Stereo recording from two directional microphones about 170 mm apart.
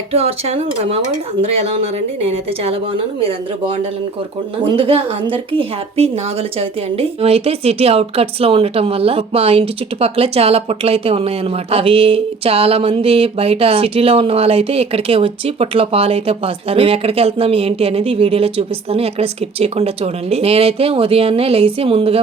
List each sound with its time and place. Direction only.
0.1 s a woman's voice: 35° right (ahead or behind)
4.6 s a woman's voice: 30° right (ahead or behind)